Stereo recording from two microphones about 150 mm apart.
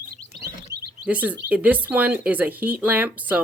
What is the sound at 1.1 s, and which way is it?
Speech, 10° right (ahead or behind).